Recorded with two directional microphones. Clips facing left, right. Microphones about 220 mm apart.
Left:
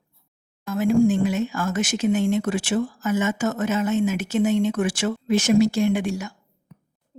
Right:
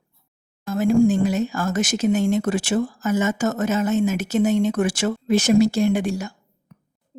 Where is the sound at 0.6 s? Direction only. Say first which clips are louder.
Right 1 dB; 40° right (ahead or behind).